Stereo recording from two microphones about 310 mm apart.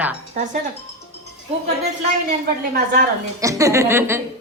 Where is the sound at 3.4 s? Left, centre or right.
Centre.